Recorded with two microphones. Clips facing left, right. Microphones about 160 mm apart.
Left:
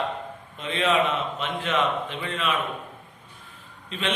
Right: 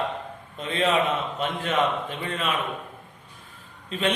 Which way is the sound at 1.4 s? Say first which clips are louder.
Right 2 dB; 40° right (ahead or behind).